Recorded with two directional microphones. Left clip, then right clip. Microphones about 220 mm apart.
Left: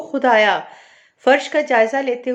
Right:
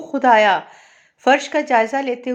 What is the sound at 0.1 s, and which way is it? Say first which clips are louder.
Speech: right 1 dB; 30° right (ahead or behind).